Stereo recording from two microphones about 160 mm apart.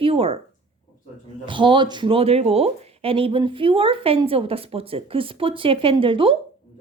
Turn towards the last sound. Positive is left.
turn(degrees=-35)  # may be behind; listen again after turning